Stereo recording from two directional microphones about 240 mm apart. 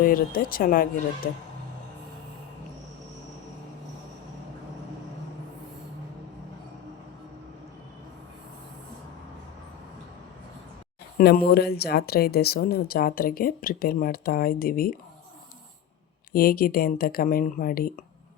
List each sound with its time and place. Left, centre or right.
0.0 s speech: left
11.2 s speech: left
16.3 s speech: left